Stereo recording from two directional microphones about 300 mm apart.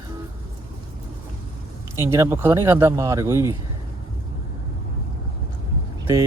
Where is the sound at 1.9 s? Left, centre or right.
Centre.